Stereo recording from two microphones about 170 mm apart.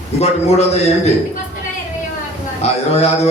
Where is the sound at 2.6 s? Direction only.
40° left (ahead or behind).